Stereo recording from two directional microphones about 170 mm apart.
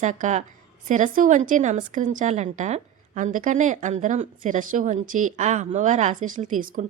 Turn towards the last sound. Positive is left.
turn(degrees=-45)  # may be behind; listen again after turning